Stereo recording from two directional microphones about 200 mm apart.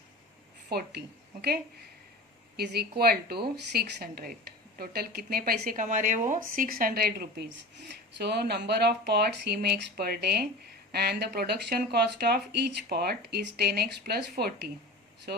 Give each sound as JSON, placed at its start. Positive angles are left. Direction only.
{"t": 0.7, "sound": "a woman's voice", "side_deg": -55}
{"t": 3.0, "sound": "speech", "side_deg": -50}